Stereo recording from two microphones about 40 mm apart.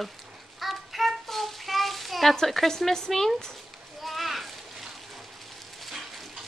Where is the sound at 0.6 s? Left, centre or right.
Centre.